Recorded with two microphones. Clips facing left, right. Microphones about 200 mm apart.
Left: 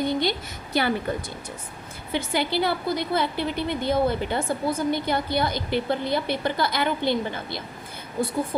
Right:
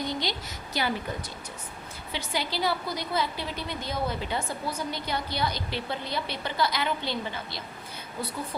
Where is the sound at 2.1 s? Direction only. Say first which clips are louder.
Left 7 dB; 55° left (ahead or behind).